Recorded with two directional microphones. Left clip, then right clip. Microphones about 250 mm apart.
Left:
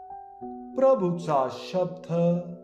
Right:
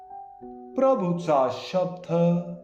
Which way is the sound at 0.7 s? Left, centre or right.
Left.